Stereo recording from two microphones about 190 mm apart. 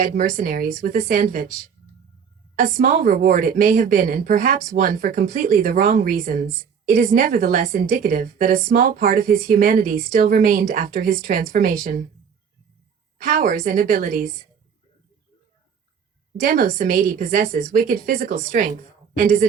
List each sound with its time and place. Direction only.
0.0 s a woman's voice: 45° right (ahead or behind)
2.6 s a woman's voice: 45° right (ahead or behind)
13.2 s a woman's voice: 45° right (ahead or behind)
16.4 s a woman's voice: 45° right (ahead or behind)